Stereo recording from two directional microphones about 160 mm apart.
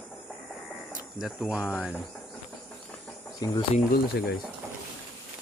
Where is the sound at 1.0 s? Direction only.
5° right (ahead or behind).